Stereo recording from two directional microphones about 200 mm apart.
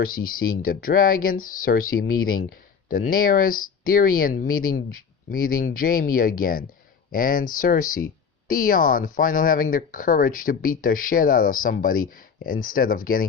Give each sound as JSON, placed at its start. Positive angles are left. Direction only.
{"t": 0.3, "sound": "speech", "side_deg": 90}
{"t": 0.6, "sound": "speech", "side_deg": 45}